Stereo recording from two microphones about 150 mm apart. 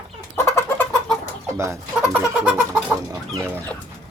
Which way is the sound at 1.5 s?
20° right (ahead or behind).